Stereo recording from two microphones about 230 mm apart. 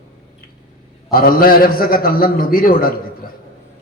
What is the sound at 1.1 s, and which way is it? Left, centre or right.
A man's voice, left.